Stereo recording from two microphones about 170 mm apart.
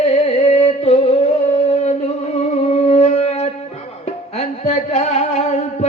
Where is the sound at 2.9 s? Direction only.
40° left (ahead or behind).